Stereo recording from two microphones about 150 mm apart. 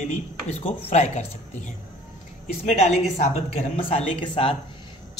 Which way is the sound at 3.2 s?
40° left (ahead or behind).